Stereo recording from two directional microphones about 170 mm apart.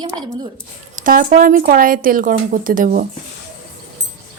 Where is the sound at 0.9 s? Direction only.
55° right (ahead or behind).